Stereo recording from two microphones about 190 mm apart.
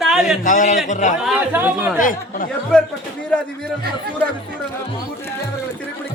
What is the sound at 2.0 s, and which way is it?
Speech, 45° left (ahead or behind).